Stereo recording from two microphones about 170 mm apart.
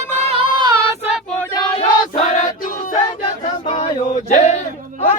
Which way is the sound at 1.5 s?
25° left (ahead or behind).